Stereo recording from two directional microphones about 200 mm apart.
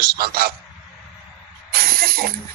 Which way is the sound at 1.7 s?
50° right (ahead or behind).